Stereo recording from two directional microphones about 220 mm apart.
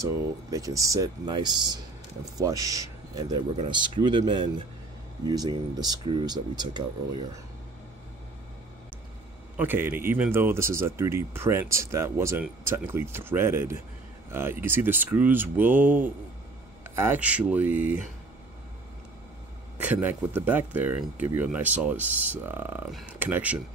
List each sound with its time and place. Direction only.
0.0 s speech: 15° right (ahead or behind)
9.6 s speech: 10° right (ahead or behind)
19.8 s speech: 5° right (ahead or behind)